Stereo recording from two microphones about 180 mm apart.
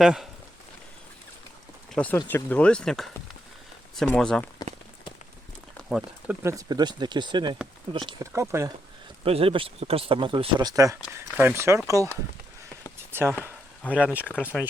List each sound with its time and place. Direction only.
0.0 s speech: 5° right (ahead or behind)
1.9 s speech: 5° left (ahead or behind)
5.7 s a sound: centre (ahead or behind)
6.4 s speech: 15° right (ahead or behind)
8.3 s speech: 15° right (ahead or behind)
9.2 s speech: 30° right (ahead or behind); by 11.8 s 15° right (ahead or behind)
13.1 s a sound: 10° right (ahead or behind)
13.9 s speech: 10° right (ahead or behind)